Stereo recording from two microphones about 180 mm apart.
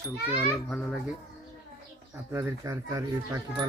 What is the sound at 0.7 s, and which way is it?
Speech, 5° left (ahead or behind).